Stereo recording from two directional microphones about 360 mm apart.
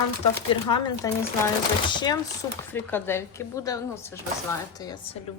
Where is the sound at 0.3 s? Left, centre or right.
Centre.